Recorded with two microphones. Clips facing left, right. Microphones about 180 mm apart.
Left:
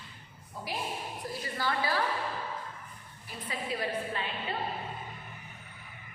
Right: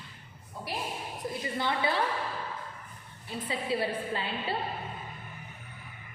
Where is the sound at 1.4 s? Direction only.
20° right (ahead or behind).